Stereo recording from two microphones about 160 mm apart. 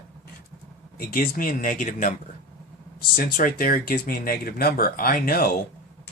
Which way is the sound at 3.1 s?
60° left (ahead or behind).